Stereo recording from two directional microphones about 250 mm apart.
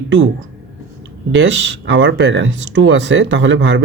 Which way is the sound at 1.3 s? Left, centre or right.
Right.